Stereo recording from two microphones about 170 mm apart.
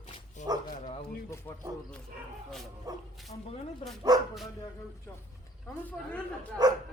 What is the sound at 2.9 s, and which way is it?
Dog, 20° right (ahead or behind).